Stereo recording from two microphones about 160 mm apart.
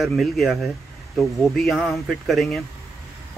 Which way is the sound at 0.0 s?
Centre (ahead or behind).